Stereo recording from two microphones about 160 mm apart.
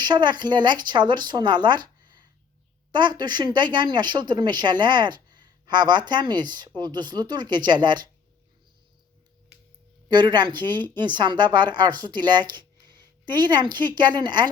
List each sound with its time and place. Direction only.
0.0 s speech: 30° right (ahead or behind)
10.1 s speech: 30° right (ahead or behind)